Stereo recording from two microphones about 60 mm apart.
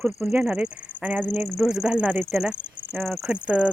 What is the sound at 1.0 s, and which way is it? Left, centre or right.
Speech, right.